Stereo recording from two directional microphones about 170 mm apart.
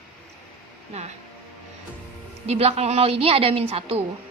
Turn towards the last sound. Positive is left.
turn(degrees=-35)  # may be behind; listen again after turning